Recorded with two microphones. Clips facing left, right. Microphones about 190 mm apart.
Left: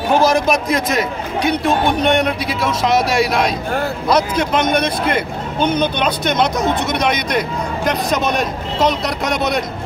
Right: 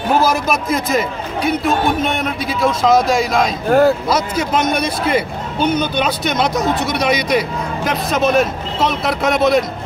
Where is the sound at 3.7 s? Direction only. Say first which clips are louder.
Right 9 dB; 40° right (ahead or behind).